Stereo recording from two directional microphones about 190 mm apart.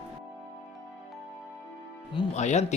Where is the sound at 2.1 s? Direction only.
30° left (ahead or behind).